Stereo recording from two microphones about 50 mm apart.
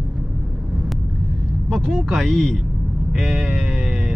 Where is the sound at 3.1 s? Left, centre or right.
Centre.